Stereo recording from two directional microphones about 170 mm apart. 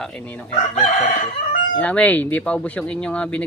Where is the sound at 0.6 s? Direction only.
45° left (ahead or behind).